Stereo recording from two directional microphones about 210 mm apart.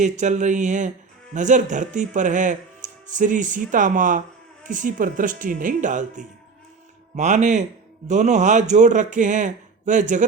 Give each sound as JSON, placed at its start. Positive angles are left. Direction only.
{"t": 0.0, "sound": "a man's voice", "side_deg": -35}